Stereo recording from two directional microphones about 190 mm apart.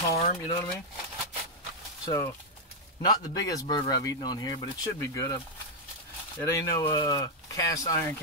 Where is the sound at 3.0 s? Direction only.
20° left (ahead or behind).